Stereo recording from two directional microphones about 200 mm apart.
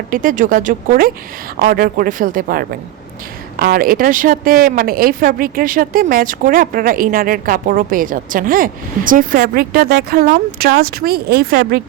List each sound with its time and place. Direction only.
0.1 s speech: 45° right (ahead or behind)